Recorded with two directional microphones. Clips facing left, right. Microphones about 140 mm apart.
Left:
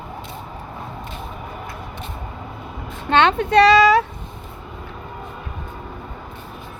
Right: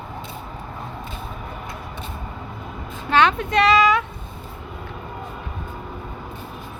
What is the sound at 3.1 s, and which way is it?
Speech, 30° left (ahead or behind).